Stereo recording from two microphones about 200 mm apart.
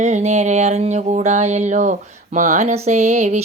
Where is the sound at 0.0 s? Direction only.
35° right (ahead or behind).